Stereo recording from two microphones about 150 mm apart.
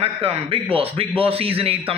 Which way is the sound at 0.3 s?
40° right (ahead or behind).